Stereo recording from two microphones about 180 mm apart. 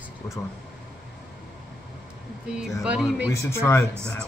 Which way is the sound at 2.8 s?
5° right (ahead or behind).